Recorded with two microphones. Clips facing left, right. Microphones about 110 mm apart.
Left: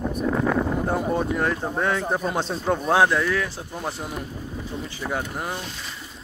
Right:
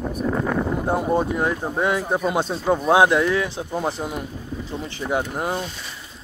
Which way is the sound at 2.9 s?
15° right (ahead or behind).